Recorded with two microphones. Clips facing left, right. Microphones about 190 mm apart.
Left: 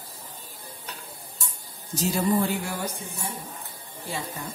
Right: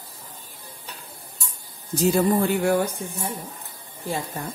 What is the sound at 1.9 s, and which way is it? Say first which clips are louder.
Speech: right 4 dB; 60° right (ahead or behind).